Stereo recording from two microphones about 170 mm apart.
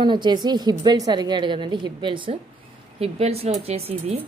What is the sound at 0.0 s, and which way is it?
A woman's voice, 25° right (ahead or behind).